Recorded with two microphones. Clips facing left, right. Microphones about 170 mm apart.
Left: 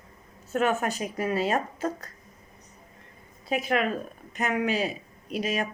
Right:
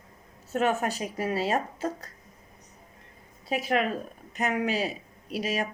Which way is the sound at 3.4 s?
35° right (ahead or behind).